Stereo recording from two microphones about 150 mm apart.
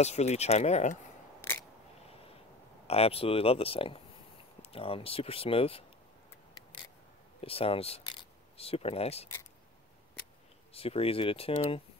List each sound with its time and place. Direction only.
0.0 s speech: 45° left (ahead or behind)
1.4 s single-lens reflex camera: 15° left (ahead or behind)
2.9 s speech: 40° left (ahead or behind)
7.4 s speech: 40° left (ahead or behind)
10.7 s speech: 40° left (ahead or behind)